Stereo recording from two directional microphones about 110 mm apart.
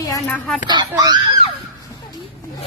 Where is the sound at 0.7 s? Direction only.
40° right (ahead or behind).